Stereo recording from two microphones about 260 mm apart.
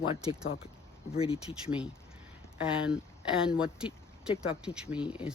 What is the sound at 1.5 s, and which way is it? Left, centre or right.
Speech, centre.